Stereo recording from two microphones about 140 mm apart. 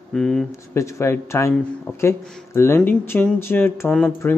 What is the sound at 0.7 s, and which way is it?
Speech, 20° left (ahead or behind).